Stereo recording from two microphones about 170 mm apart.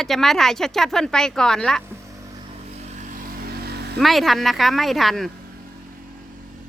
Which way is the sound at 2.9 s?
50° right (ahead or behind).